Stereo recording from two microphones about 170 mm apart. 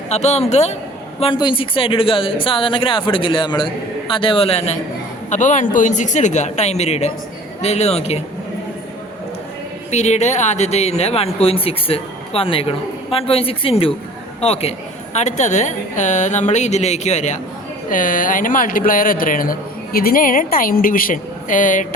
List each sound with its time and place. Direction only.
0.1 s speech: 40° left (ahead or behind)
1.2 s speech: 30° left (ahead or behind)
9.9 s speech: 40° left (ahead or behind)